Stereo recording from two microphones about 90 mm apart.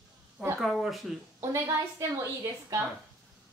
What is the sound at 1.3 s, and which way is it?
A woman's voice, 30° right (ahead or behind).